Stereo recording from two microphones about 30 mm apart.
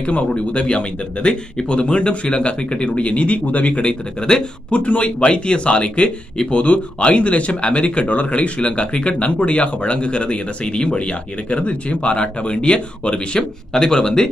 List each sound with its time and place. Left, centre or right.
0.0 s speech: left
0.5 s speech: left
3.8 s speech: left
4.6 s speech: left
13.4 s speech: left